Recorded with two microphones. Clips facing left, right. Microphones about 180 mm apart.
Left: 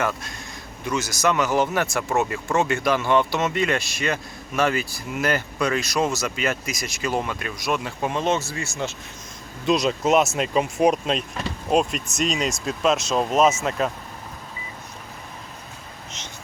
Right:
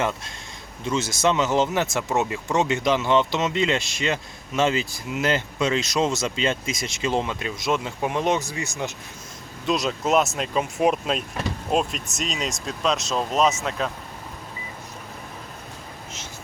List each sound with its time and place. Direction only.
0.9 s speech: 25° right (ahead or behind)
9.6 s speech: centre (ahead or behind)